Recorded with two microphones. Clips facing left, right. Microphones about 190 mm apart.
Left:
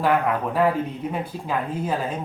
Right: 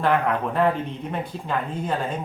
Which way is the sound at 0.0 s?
5° left (ahead or behind).